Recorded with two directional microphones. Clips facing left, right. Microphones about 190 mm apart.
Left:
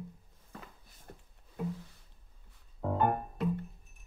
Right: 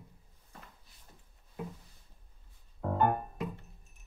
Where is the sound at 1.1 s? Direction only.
65° left (ahead or behind).